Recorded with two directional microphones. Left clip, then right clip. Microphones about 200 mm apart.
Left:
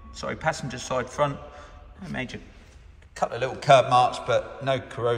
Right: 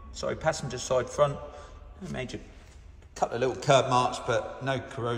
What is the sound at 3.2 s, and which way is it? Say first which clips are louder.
A man's voice: left 1 dB; 25° right (ahead or behind).